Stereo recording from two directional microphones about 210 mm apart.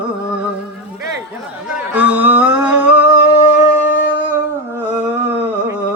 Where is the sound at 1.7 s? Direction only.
10° right (ahead or behind).